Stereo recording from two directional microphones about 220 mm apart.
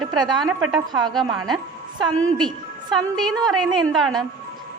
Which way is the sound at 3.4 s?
Centre (ahead or behind).